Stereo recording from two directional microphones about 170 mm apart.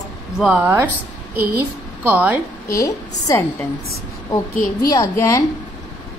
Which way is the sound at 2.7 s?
20° left (ahead or behind).